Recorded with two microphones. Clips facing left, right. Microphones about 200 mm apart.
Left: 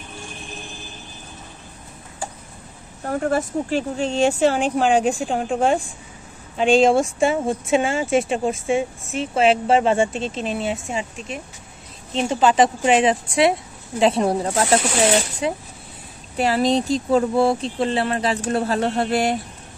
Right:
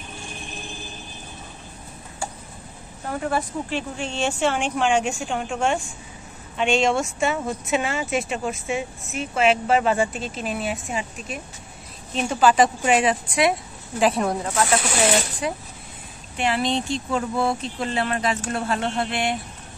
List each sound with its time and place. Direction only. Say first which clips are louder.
3.0 s speech: left 4 dB; 45° left (ahead or behind)